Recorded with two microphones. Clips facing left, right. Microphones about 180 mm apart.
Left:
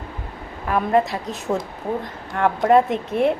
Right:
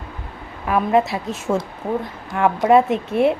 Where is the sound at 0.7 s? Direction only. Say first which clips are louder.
Right 1 dB; 5° right (ahead or behind).